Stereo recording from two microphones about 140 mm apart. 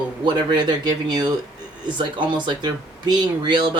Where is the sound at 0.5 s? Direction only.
30° right (ahead or behind).